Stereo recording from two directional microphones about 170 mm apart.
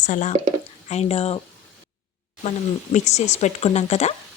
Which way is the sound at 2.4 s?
40° left (ahead or behind).